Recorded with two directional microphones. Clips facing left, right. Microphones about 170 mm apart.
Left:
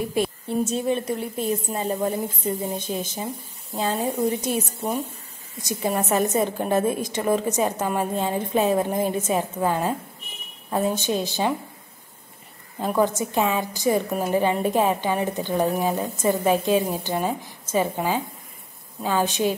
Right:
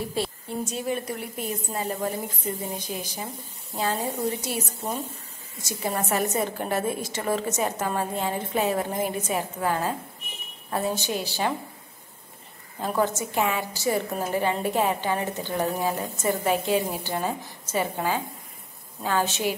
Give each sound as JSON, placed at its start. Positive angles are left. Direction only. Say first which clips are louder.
{"t": 0.1, "sound": "a woman's voice", "louder": "left 5 dB", "side_deg": 20}
{"t": 12.8, "sound": "a woman's voice", "louder": "left 3 dB", "side_deg": 15}